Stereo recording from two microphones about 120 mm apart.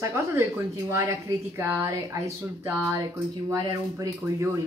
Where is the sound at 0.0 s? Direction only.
25° right (ahead or behind).